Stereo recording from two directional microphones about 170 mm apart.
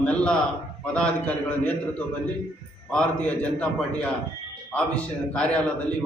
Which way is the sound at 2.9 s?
5° left (ahead or behind).